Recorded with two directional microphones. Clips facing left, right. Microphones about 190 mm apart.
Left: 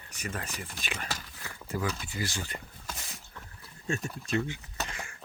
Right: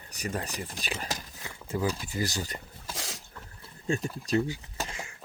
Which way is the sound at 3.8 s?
30° right (ahead or behind).